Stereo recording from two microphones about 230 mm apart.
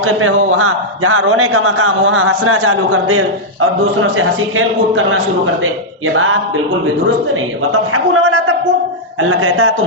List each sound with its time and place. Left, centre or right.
0.0 s a man's voice: right
7.7 s a man's voice: right
9.4 s a man's voice: right